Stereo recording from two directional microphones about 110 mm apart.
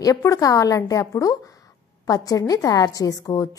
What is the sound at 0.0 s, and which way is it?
A woman's voice, 30° left (ahead or behind).